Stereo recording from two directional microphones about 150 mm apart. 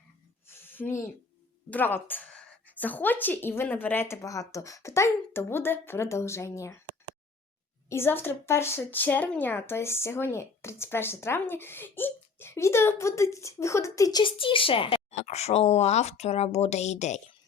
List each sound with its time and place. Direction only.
0.4 s a sound: 15° left (ahead or behind)
1.7 s a woman's voice: 15° left (ahead or behind)
7.9 s speech: 15° left (ahead or behind); by 17.2 s 50° left (ahead or behind)